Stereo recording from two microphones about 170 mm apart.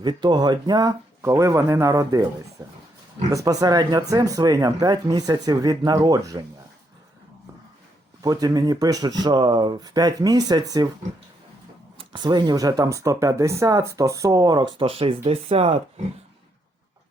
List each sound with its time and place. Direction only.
0.0 s speech: 25° right (ahead or behind)
8.2 s speech: 20° right (ahead or behind)
12.1 s speech: 25° right (ahead or behind)